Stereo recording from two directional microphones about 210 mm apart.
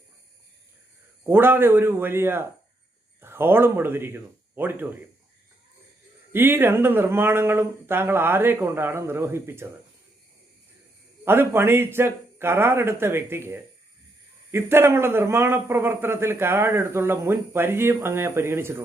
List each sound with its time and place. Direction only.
1.3 s a man's voice: 10° right (ahead or behind)
6.3 s a man's voice: 10° right (ahead or behind)
11.3 s a man's voice: 10° right (ahead or behind)